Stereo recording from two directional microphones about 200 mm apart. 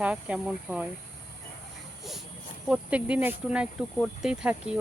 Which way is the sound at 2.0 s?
Centre (ahead or behind).